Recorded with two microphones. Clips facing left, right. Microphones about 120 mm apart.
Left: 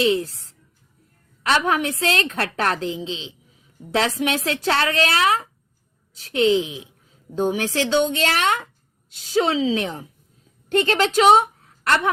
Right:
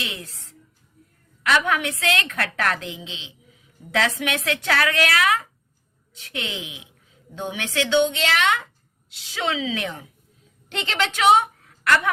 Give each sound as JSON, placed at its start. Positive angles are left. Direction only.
{"t": 0.0, "sound": "a woman's voice", "side_deg": 30}
{"t": 1.5, "sound": "a woman's voice", "side_deg": 30}
{"t": 10.7, "sound": "a woman's voice", "side_deg": 45}